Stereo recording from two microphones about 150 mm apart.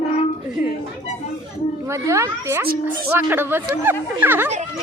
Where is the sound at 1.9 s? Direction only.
20° right (ahead or behind).